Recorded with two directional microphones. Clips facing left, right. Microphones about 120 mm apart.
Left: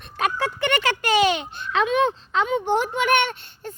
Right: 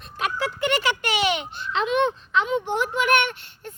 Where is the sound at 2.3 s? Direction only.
45° left (ahead or behind).